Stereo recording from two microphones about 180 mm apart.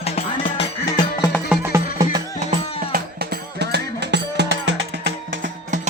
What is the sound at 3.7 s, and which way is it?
Music, 70° right (ahead or behind).